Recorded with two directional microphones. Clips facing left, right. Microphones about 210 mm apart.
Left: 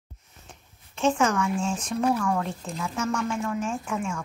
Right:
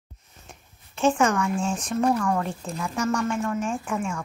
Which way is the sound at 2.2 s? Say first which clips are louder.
Right 1 dB; centre (ahead or behind).